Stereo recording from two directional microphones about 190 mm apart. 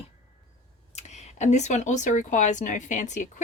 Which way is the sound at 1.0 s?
35° left (ahead or behind).